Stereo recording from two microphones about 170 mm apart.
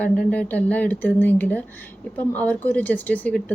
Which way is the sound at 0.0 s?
10° left (ahead or behind).